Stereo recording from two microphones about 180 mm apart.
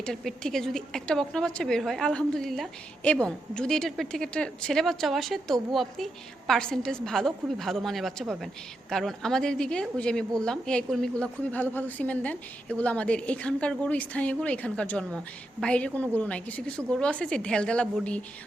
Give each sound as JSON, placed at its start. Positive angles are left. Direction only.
{"t": 0.0, "sound": "a woman's voice", "side_deg": 5}